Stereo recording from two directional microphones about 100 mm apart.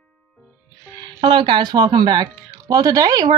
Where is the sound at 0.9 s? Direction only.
55° right (ahead or behind).